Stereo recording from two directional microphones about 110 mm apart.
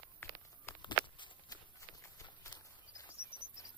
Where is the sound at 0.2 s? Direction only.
20° left (ahead or behind).